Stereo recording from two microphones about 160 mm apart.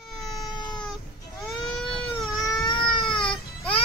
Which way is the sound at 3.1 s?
5° left (ahead or behind).